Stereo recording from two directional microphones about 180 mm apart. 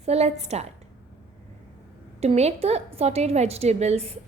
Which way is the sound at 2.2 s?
35° right (ahead or behind).